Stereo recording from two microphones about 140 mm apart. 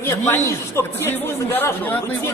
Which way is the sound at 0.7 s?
15° left (ahead or behind).